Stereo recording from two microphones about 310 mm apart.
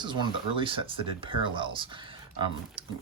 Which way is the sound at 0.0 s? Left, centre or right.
Centre.